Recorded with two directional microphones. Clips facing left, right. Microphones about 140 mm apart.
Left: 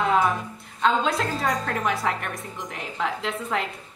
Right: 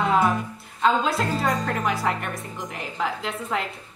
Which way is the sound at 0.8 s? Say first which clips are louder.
Right 1 dB; centre (ahead or behind).